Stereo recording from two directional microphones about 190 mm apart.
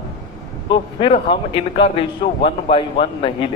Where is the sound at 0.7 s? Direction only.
25° left (ahead or behind).